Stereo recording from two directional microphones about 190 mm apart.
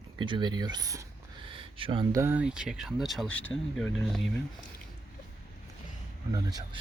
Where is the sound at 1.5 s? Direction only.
30° right (ahead or behind).